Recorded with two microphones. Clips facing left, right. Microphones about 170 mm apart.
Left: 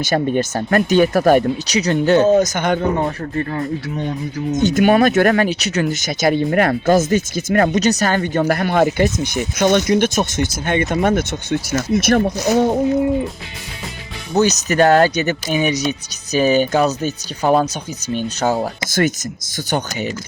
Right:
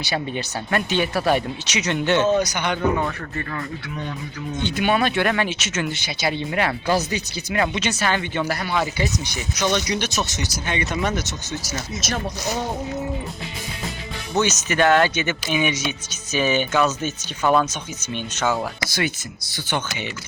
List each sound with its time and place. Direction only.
0.0 s speech: 45° left (ahead or behind)
3.0 s speech: 30° left (ahead or behind); by 12.6 s 60° left (ahead or behind)
14.3 s speech: 35° left (ahead or behind)